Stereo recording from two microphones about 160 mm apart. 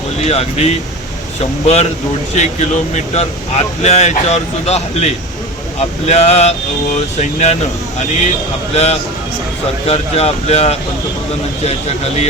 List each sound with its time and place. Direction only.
0.3 s speech: 40° left (ahead or behind)
8.7 s speech: 40° left (ahead or behind)